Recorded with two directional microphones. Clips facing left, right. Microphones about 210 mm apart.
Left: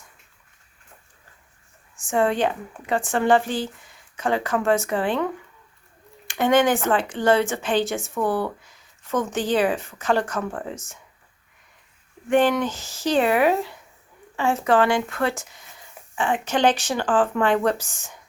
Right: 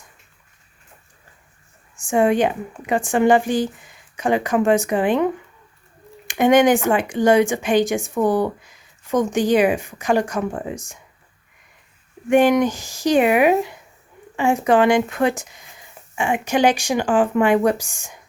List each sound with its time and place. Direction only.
2.0 s speech: 15° right (ahead or behind)
12.3 s speech: 15° right (ahead or behind)